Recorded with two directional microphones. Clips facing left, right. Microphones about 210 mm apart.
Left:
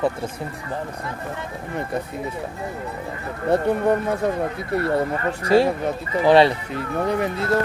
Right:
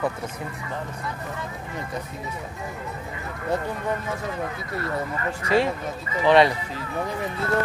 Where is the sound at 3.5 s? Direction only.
60° left (ahead or behind).